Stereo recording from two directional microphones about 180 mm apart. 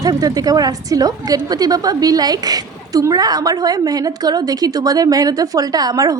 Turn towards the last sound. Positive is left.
turn(degrees=-20)  # may be behind; listen again after turning